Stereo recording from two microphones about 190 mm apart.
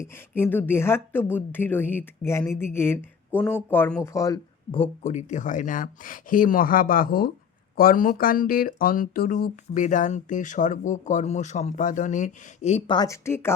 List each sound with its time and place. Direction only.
0.3 s speech: 10° left (ahead or behind)
4.8 s speech: 40° left (ahead or behind)
13.0 s speech: 15° left (ahead or behind)